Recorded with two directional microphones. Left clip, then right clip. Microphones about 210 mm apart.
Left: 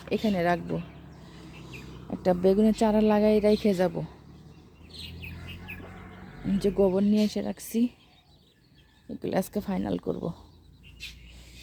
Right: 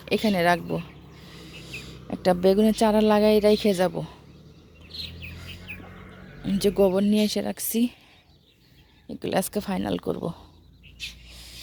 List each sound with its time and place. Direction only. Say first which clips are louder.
0.0 s speech: right 5 dB; 10° right (ahead or behind)
5.7 s chicken: right 2 dB; 30° left (ahead or behind)
6.4 s speech: right 3 dB; 5° right (ahead or behind)
9.0 s speech: right 3 dB; centre (ahead or behind)
11.3 s a sound: right 8 dB; centre (ahead or behind)